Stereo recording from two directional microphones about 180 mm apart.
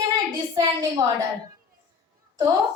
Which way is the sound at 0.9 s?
20° right (ahead or behind).